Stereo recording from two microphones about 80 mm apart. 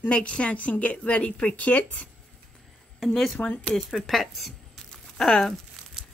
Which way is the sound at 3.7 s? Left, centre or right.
Centre.